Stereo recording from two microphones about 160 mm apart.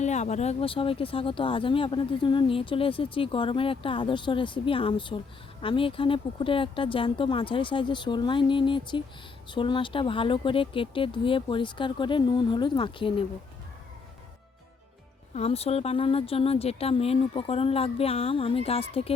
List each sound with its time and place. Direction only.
0.0 s speech: 45° left (ahead or behind)
15.4 s speech: 40° left (ahead or behind)